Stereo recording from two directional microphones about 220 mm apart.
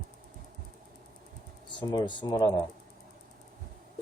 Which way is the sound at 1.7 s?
20° left (ahead or behind).